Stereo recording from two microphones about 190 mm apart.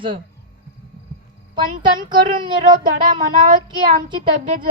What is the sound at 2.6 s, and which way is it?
Speech, 45° right (ahead or behind).